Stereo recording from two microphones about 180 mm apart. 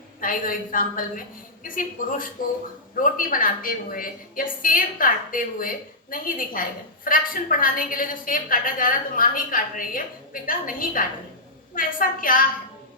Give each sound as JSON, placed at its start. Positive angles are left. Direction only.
{"t": 0.2, "sound": "a woman's voice", "side_deg": 50}